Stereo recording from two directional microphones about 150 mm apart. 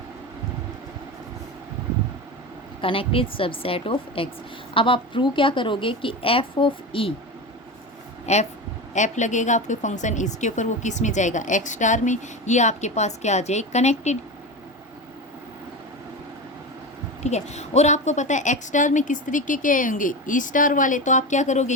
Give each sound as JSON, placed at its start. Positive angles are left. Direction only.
{"t": 2.8, "sound": "a woman's voice", "side_deg": 35}
{"t": 8.3, "sound": "a woman's voice", "side_deg": 45}
{"t": 17.2, "sound": "a woman's voice", "side_deg": 50}